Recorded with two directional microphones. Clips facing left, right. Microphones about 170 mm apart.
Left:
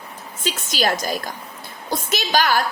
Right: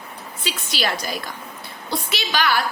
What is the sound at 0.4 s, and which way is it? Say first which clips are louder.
A woman's voice: left 4 dB; 45° left (ahead or behind).